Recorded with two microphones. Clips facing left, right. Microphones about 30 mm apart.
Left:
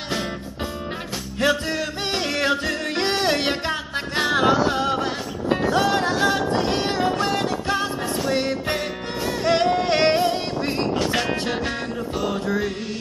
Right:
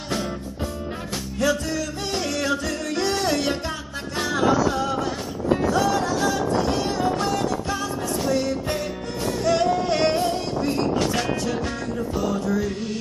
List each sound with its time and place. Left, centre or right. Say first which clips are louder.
1.4 s music: left 2 dB; left
12.2 s mantra: left 1 dB; left